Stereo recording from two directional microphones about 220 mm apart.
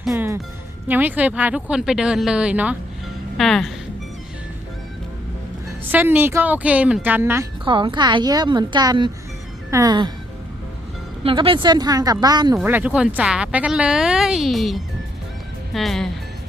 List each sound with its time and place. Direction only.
0.1 s speech: 15° right (ahead or behind)
5.6 s speech: 10° right (ahead or behind)
7.6 s a woman's voice: 20° right (ahead or behind)
11.2 s a woman's voice: 25° right (ahead or behind)
12.5 s speech: 5° right (ahead or behind)